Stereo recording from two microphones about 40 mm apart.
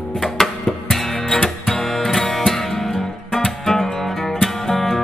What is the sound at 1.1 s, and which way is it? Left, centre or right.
Music, centre.